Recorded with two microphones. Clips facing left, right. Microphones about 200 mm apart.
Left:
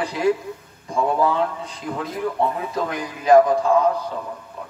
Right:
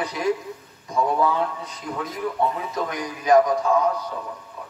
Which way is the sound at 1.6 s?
30° left (ahead or behind).